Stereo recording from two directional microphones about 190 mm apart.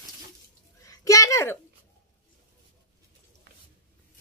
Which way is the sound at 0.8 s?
15° left (ahead or behind).